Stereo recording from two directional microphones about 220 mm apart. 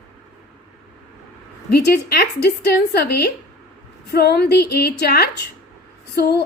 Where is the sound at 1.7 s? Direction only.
45° left (ahead or behind).